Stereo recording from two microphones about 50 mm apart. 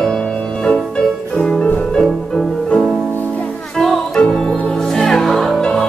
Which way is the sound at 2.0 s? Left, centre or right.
Centre.